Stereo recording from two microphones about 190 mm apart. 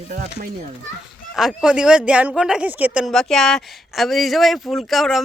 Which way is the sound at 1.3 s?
Centre (ahead or behind).